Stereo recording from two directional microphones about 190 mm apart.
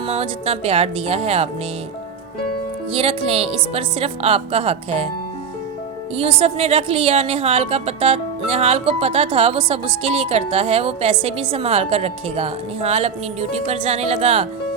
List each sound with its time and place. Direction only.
0.0 s a woman's voice: 30° right (ahead or behind)
2.9 s a woman's voice: 30° right (ahead or behind)
6.1 s a woman's voice: 35° right (ahead or behind)